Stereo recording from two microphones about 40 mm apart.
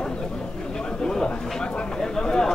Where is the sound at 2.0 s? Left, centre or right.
Centre.